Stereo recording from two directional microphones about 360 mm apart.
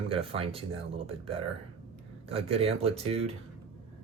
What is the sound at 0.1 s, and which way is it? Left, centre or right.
Speech, centre.